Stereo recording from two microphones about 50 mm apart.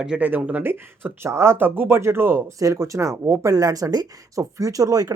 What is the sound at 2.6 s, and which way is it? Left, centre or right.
Speech, right.